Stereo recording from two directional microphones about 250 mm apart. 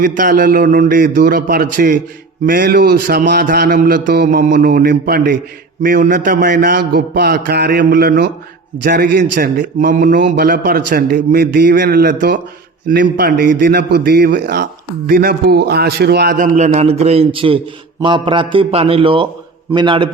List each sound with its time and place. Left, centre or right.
0.0 s a man's voice: right; by 20.1 s centre